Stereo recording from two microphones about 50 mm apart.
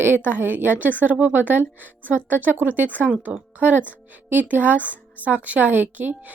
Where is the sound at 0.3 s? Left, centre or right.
Right.